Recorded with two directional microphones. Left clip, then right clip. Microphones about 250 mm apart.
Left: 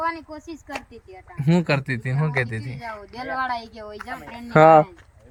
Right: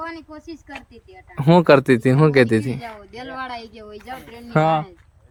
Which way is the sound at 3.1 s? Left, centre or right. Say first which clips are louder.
Left 5 dB; centre.